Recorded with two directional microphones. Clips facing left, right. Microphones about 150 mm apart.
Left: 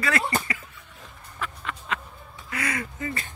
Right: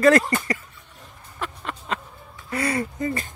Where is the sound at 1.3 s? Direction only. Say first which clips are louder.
Right 2 dB; 35° right (ahead or behind).